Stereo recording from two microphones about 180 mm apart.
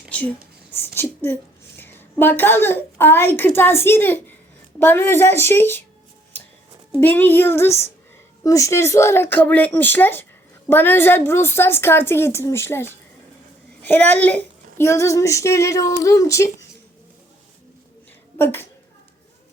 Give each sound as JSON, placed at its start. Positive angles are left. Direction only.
{"t": 0.1, "sound": "whispering", "side_deg": 10}
{"t": 0.9, "sound": "a woman's voice", "side_deg": 10}
{"t": 4.8, "sound": "child singing", "side_deg": 10}
{"t": 7.0, "sound": "child singing", "side_deg": 10}
{"t": 18.3, "sound": "a woman's voice", "side_deg": 10}